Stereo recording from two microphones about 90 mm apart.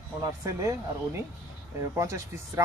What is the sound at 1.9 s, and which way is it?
Speech, 35° right (ahead or behind).